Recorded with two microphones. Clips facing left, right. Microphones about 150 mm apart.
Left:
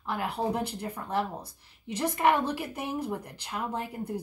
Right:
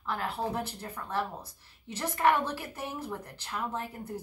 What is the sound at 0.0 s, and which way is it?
Speech, 15° left (ahead or behind).